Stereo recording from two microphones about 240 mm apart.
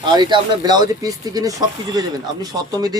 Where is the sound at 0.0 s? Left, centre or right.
Centre.